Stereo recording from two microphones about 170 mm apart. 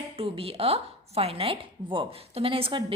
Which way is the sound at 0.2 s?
35° right (ahead or behind).